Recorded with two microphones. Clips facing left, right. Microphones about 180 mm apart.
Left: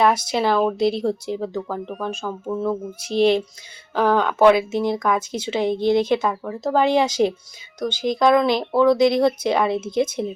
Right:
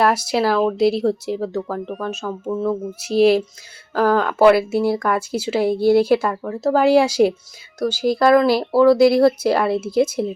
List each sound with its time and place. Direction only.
0.0 s speech: 5° right (ahead or behind)